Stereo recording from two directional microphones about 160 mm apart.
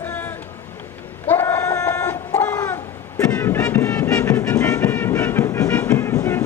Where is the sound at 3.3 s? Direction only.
10° left (ahead or behind).